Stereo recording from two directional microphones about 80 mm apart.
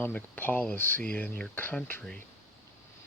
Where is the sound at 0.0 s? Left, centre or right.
Left.